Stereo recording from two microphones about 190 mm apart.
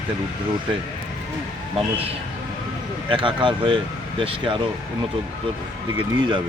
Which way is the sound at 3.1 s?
25° right (ahead or behind).